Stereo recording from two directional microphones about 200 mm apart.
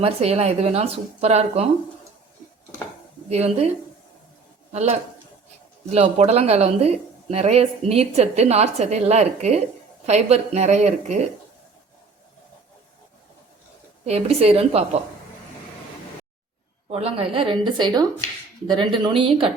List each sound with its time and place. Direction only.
0.0 s speech: 30° right (ahead or behind)
3.2 s speech: 30° right (ahead or behind)
4.7 s speech: 35° right (ahead or behind)
14.0 s a woman's voice: 30° right (ahead or behind)
16.9 s a woman's voice: 30° right (ahead or behind)